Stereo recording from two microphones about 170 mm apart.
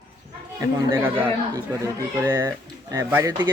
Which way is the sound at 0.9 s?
10° right (ahead or behind).